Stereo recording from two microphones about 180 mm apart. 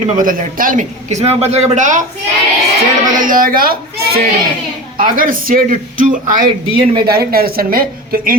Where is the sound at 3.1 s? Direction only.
50° right (ahead or behind).